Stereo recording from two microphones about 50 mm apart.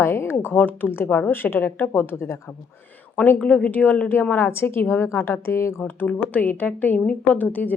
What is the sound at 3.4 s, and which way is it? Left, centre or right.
Speech, left.